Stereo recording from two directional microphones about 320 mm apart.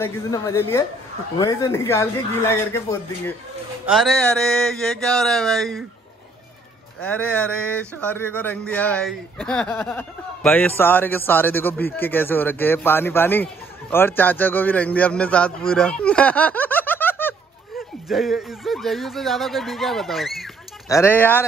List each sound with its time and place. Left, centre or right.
0.0 s speech: centre
7.0 s speech: centre